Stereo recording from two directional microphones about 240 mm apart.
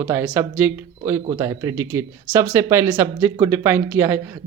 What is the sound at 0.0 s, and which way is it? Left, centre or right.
Speech, centre.